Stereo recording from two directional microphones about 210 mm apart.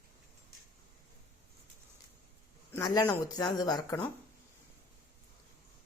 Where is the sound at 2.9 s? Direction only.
15° left (ahead or behind).